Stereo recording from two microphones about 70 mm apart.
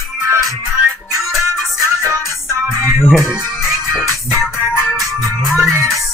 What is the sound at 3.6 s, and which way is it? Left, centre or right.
Music, centre.